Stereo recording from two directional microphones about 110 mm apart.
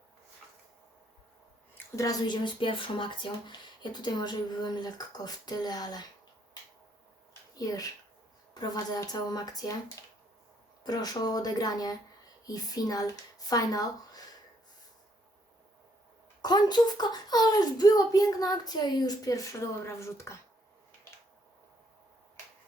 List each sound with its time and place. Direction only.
2.0 s speech: 35° left (ahead or behind)
7.5 s speech: 35° left (ahead or behind)
10.8 s speech: 35° left (ahead or behind)
16.4 s speech: 40° left (ahead or behind); by 20.4 s 25° left (ahead or behind)